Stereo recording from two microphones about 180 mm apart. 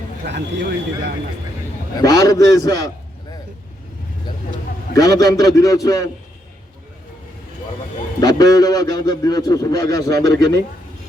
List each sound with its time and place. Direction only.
0.3 s speech: 65° right (ahead or behind)
2.0 s a man's voice: 20° left (ahead or behind)
4.9 s a man's voice: 20° left (ahead or behind)
8.2 s a man's voice: 20° left (ahead or behind)